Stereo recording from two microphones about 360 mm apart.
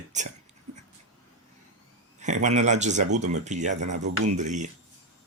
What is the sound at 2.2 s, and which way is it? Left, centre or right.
Speech, centre.